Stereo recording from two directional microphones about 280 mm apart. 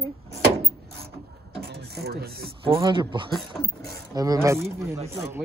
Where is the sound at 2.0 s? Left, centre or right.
Right.